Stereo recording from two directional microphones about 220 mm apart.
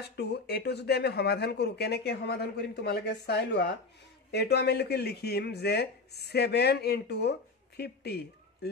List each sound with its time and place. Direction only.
0.0 s speech: 50° left (ahead or behind)